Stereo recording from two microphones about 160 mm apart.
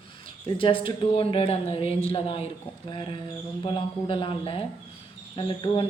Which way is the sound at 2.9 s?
30° left (ahead or behind).